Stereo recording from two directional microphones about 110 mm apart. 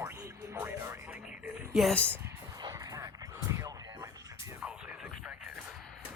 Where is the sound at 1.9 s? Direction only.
10° left (ahead or behind).